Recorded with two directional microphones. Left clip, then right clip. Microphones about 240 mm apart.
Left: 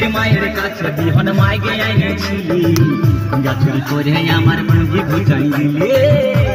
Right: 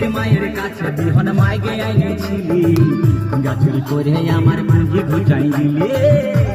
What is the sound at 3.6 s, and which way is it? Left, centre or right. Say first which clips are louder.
Music: left 1 dB; left.